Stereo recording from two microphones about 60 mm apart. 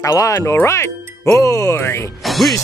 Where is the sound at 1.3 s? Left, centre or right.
Left.